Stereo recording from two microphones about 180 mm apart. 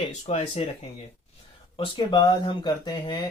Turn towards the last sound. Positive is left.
turn(degrees=25)  # may be behind; listen again after turning